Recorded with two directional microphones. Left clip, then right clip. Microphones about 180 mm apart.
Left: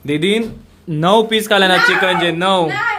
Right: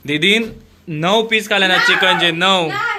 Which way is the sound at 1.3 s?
30° left (ahead or behind).